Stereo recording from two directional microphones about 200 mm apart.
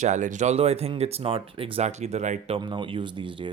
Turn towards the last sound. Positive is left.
turn(degrees=-25)  # may be behind; listen again after turning